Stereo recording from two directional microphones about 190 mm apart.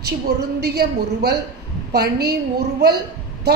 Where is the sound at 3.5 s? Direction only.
60° right (ahead or behind).